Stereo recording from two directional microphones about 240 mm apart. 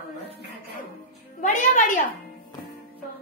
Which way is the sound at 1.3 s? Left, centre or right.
Left.